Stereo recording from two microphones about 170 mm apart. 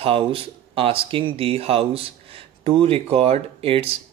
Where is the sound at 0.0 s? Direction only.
30° right (ahead or behind).